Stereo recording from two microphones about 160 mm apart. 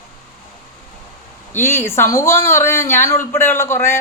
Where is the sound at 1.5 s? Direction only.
15° left (ahead or behind).